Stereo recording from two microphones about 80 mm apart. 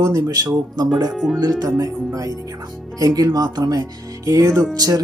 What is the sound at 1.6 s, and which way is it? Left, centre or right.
Speech, right.